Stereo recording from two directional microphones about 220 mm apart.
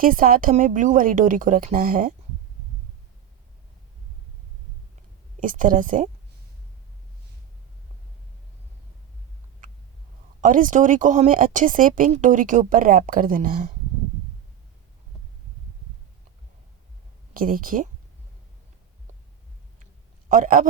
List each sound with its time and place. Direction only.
0.0 s speech: 40° right (ahead or behind)
5.4 s speech: 35° right (ahead or behind)
10.4 s speech: 35° right (ahead or behind)
17.3 s speech: 40° right (ahead or behind)
19.8 s a sound: 35° right (ahead or behind)